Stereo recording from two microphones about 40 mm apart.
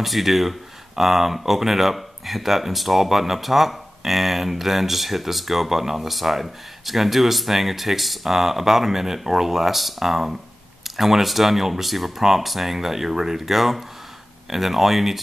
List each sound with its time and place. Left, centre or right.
0.0 s speech: centre